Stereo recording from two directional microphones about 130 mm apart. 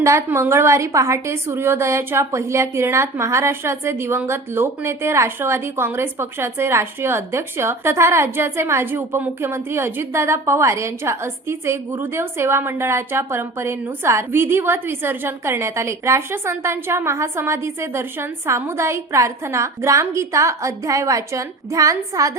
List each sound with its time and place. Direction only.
0.0 s a woman's voice: 20° right (ahead or behind)